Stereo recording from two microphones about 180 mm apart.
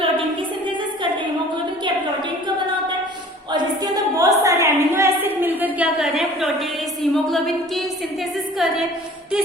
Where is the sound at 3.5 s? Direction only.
20° right (ahead or behind); by 7.8 s centre (ahead or behind).